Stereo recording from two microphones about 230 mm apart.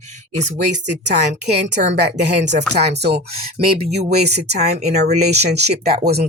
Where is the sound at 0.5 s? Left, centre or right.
Right.